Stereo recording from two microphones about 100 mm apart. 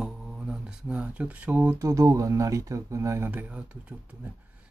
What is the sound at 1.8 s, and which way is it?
Speech, 35° right (ahead or behind).